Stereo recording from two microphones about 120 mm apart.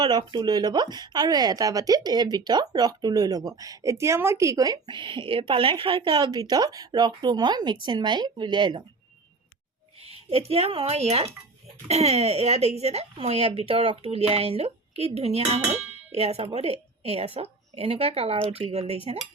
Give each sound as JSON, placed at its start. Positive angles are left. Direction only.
{"t": 0.0, "sound": "speech", "side_deg": -40}
{"t": 10.0, "sound": "speech", "side_deg": -55}